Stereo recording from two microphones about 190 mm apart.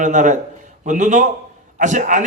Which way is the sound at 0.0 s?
40° right (ahead or behind).